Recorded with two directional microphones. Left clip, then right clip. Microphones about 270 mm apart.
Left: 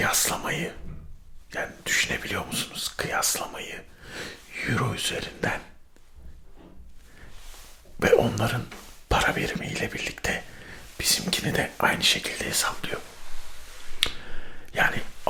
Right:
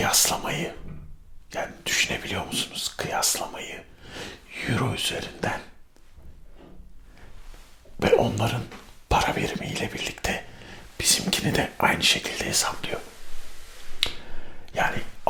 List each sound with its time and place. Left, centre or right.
0.0 s speech: centre
7.9 s speech: centre
14.0 s finger snapping: centre